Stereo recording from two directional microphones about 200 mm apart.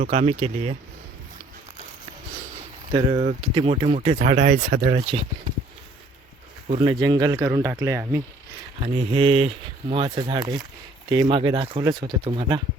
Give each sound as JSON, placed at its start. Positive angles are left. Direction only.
{"t": 0.0, "sound": "speech", "side_deg": -35}
{"t": 2.9, "sound": "speech", "side_deg": -30}
{"t": 6.7, "sound": "speech", "side_deg": -25}
{"t": 8.8, "sound": "speech", "side_deg": -30}